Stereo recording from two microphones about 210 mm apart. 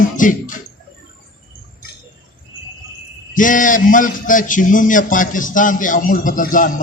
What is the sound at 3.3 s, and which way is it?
A man's voice, 40° left (ahead or behind).